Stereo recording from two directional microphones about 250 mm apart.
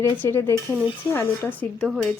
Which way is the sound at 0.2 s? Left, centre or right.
Centre.